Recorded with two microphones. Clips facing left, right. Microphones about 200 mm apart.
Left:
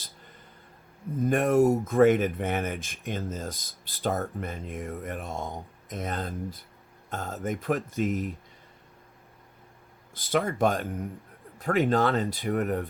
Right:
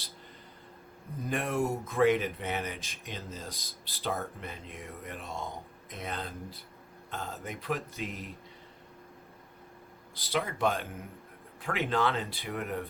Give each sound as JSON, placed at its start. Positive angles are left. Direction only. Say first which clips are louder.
{"t": 1.3, "sound": "speech", "louder": "left 9 dB", "side_deg": 50}
{"t": 10.2, "sound": "speech", "louder": "left 6 dB", "side_deg": 50}